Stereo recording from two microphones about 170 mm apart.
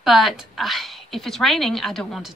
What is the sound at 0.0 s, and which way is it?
A woman's voice, centre (ahead or behind).